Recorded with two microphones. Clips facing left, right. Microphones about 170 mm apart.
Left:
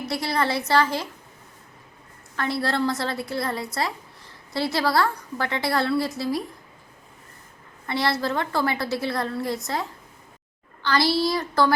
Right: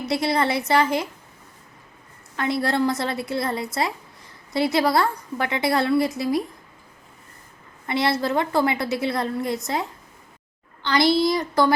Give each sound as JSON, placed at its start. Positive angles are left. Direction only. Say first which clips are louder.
{"t": 0.0, "sound": "a woman's voice", "louder": "right 3 dB", "side_deg": -20}
{"t": 2.3, "sound": "a woman's voice", "louder": "right 2 dB", "side_deg": -20}
{"t": 7.9, "sound": "a woman's voice", "louder": "right 2 dB", "side_deg": -20}
{"t": 10.8, "sound": "a woman's voice", "louder": "right 3 dB", "side_deg": -20}